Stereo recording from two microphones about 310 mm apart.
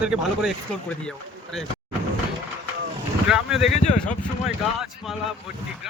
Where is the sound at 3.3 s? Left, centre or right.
Centre.